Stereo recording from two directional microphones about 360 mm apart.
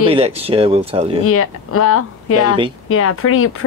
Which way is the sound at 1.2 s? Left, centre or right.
Left.